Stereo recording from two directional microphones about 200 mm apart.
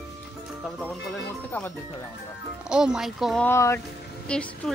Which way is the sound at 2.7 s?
5° right (ahead or behind).